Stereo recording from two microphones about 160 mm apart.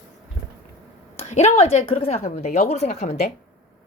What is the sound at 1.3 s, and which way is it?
A woman's voice, 40° left (ahead or behind).